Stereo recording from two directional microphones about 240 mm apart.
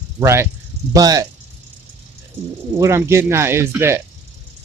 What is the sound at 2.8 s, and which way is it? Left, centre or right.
Speech, centre.